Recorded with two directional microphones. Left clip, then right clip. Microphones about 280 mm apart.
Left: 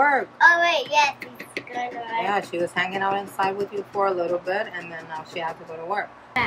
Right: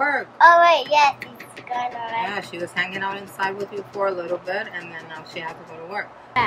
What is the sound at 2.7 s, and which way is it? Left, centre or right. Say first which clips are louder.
A woman's voice: even; centre.